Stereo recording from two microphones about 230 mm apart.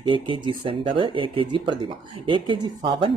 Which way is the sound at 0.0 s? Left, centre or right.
Right.